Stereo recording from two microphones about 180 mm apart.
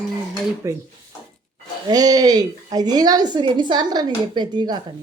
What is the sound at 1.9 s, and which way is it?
A woman's voice, 20° right (ahead or behind).